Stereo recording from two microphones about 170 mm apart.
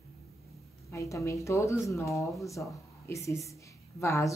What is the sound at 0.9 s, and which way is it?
A woman's voice, 20° left (ahead or behind).